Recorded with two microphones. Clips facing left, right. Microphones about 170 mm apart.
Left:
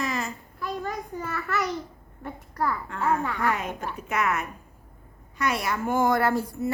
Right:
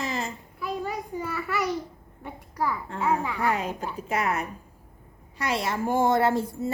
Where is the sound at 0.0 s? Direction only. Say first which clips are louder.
Left 1 dB; 25° right (ahead or behind).